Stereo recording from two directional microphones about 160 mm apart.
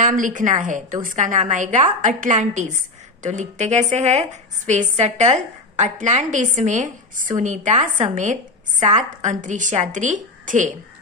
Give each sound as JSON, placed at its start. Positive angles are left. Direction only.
{"t": 0.0, "sound": "a woman's voice", "side_deg": -55}